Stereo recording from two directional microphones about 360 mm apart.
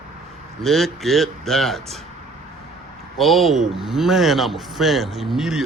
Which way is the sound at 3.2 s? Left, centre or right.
Centre.